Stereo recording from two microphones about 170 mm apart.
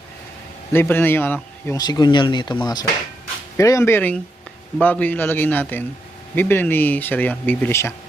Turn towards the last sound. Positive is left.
turn(degrees=15)  # may be behind; listen again after turning